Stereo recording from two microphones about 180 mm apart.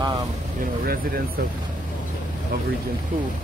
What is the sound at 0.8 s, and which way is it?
Speech, 55° right (ahead or behind).